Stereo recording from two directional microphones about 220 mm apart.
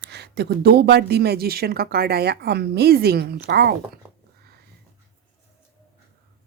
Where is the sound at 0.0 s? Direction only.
50° right (ahead or behind).